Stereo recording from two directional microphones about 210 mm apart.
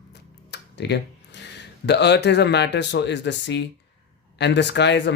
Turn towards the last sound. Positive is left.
turn(degrees=55)  # may be behind; listen again after turning